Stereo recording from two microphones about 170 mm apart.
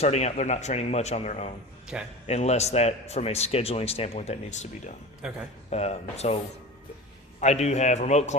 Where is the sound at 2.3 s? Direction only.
40° left (ahead or behind).